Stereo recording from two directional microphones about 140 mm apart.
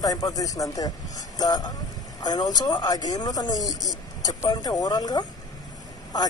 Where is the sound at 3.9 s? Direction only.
30° left (ahead or behind).